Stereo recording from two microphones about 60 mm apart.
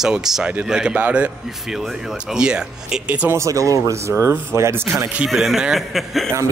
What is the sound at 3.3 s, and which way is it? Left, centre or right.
Speech, right.